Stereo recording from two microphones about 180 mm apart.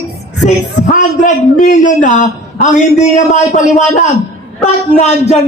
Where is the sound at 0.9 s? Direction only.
45° left (ahead or behind).